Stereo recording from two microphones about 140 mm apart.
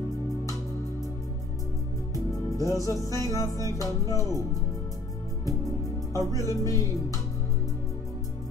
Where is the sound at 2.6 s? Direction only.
25° left (ahead or behind).